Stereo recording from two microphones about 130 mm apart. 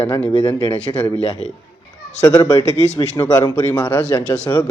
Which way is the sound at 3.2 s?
25° left (ahead or behind).